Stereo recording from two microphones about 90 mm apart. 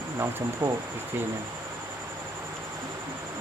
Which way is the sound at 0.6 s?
40° right (ahead or behind).